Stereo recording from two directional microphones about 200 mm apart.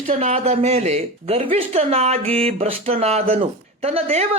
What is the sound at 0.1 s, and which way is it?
A man's voice, 35° right (ahead or behind).